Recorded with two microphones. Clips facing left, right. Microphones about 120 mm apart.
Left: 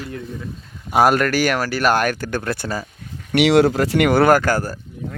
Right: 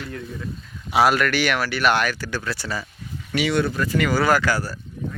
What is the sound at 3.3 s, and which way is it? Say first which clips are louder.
Speech: left 8 dB; 80° left.